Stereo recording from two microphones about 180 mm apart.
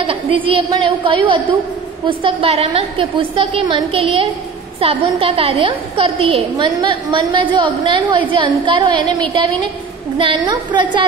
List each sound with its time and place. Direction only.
0.0 s a woman's voice: 30° right (ahead or behind)
10.1 s a woman's voice: 25° right (ahead or behind)